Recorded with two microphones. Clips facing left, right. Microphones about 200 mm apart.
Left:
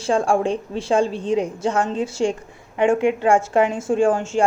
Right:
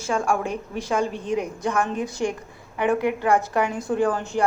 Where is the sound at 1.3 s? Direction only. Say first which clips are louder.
Left 3 dB; 30° left (ahead or behind).